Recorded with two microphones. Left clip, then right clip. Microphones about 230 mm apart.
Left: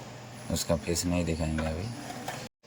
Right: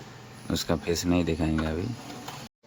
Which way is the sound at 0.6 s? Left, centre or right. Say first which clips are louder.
Right 2 dB; centre.